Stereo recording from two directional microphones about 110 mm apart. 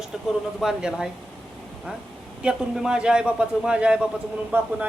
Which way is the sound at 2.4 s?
10° right (ahead or behind).